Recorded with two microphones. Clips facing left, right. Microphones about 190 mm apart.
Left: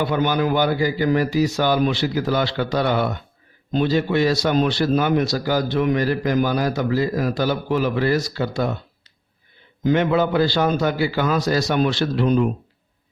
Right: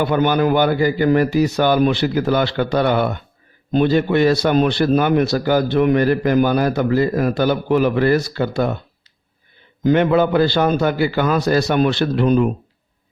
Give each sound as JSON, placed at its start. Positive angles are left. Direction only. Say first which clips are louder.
{"t": 0.0, "sound": "a man's voice", "louder": "right 4 dB", "side_deg": -55}
{"t": 9.8, "sound": "a man's voice", "louder": "right 4 dB", "side_deg": -60}